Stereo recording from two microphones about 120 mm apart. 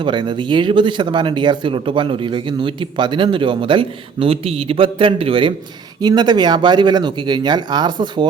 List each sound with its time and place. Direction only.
0.0 s speech: 40° right (ahead or behind)
6.0 s speech: 35° right (ahead or behind)